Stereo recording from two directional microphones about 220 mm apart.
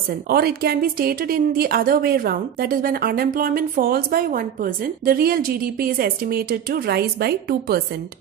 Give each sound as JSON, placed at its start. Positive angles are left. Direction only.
{"t": 0.3, "sound": "a woman's voice", "side_deg": -45}